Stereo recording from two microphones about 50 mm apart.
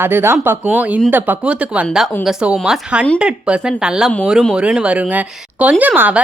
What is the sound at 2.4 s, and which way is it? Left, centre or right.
Speech, right.